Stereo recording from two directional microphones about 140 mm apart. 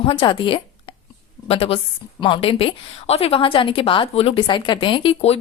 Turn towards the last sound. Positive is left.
turn(degrees=40)  # may be behind; listen again after turning